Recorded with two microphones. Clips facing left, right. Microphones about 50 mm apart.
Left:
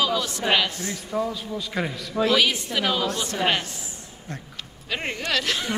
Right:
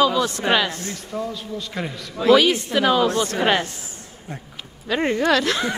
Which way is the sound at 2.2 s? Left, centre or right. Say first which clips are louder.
Right 8 dB; right.